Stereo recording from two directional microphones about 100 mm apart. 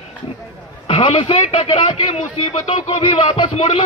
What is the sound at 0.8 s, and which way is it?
A man's voice, 65° left (ahead or behind).